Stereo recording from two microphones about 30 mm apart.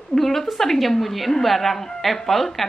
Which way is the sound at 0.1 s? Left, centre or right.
Centre.